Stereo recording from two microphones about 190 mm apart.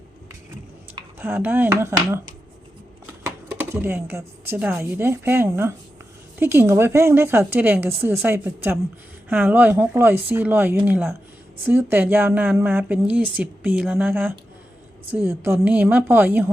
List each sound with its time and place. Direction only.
1.2 s speech: 10° right (ahead or behind)
3.2 s speech: 10° right (ahead or behind)